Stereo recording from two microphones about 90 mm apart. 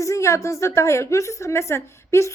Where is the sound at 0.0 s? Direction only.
35° left (ahead or behind).